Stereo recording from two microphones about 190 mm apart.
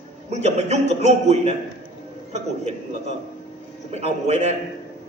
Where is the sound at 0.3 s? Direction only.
35° right (ahead or behind).